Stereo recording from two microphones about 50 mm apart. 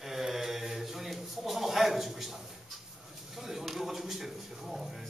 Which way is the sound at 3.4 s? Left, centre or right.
Centre.